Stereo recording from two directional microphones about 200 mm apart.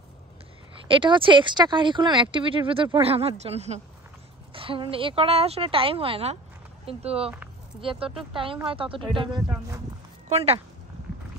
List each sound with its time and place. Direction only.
0.8 s speech: 25° right (ahead or behind)